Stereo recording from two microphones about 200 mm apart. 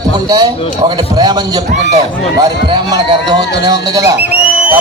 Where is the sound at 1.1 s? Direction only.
20° right (ahead or behind).